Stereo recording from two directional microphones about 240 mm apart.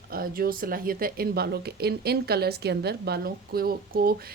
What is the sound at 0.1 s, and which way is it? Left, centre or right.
Speech, right.